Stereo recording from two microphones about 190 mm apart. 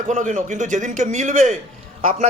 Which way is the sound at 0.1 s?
40° right (ahead or behind).